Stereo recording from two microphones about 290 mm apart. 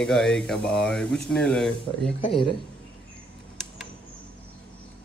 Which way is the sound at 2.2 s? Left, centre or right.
Centre.